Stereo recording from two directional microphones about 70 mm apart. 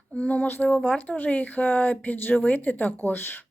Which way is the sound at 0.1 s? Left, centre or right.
Centre.